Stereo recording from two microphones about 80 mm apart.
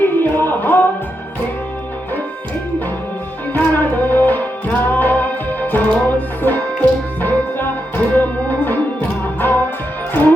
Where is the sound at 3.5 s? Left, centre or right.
Left.